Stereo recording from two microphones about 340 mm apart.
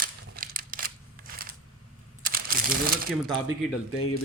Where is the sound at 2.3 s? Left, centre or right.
Right.